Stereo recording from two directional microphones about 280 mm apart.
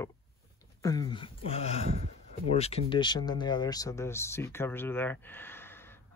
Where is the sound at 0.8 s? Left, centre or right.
Centre.